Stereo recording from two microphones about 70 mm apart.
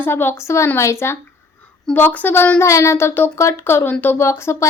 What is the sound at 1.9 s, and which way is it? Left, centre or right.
Speech, left.